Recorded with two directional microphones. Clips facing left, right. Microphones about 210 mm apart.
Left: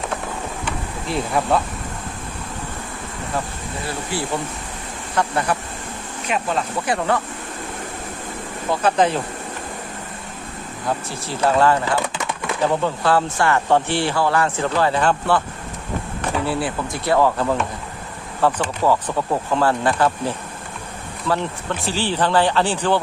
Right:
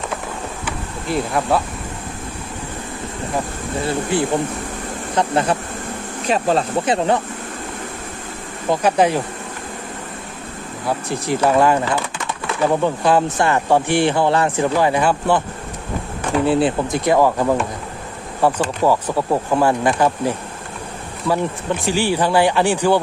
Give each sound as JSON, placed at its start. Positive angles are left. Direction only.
{"t": 0.6, "sound": "a sound", "side_deg": 0}
{"t": 3.8, "sound": "speech", "side_deg": -20}
{"t": 6.2, "sound": "speech", "side_deg": -35}
{"t": 8.7, "sound": "speech", "side_deg": -15}
{"t": 10.8, "sound": "speech", "side_deg": -15}
{"t": 12.8, "sound": "speech", "side_deg": -15}
{"t": 16.5, "sound": "speech", "side_deg": -20}